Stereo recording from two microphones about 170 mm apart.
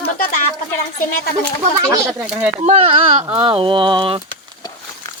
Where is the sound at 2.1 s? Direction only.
5° right (ahead or behind).